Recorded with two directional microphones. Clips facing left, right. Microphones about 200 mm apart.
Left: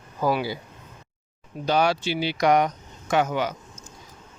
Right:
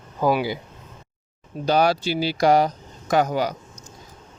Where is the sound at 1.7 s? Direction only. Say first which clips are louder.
Right 3 dB; 35° right (ahead or behind).